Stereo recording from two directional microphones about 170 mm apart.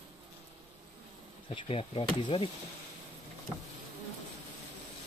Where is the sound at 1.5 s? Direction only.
30° left (ahead or behind).